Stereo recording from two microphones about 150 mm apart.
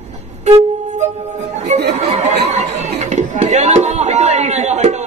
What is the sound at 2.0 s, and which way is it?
Speech, 45° right (ahead or behind).